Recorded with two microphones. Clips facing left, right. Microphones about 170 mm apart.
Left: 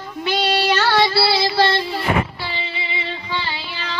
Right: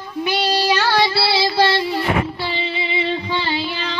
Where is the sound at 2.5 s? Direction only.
25° right (ahead or behind).